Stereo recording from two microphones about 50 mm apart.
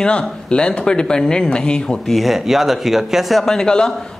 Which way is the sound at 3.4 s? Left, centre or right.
Centre.